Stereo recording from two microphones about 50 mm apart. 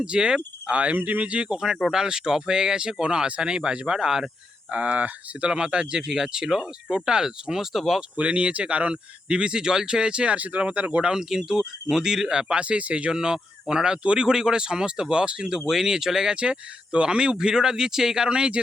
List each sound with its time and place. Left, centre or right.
0.0 s speech: centre
4.7 s speech: right
5.5 s speech: centre
8.1 s speech: right
11.1 s speech: centre